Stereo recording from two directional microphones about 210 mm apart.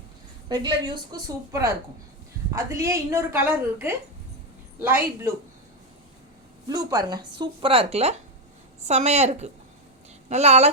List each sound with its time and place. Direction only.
0.4 s a woman's voice: 20° right (ahead or behind)
6.7 s a woman's voice: 20° right (ahead or behind)